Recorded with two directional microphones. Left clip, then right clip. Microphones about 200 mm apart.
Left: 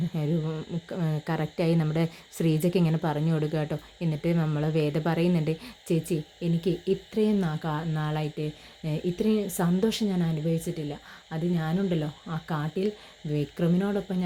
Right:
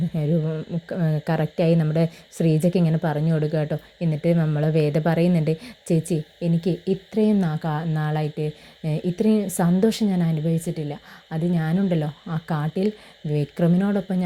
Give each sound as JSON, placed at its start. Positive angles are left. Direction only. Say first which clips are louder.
{"t": 0.1, "sound": "speech", "louder": "right 7 dB", "side_deg": -10}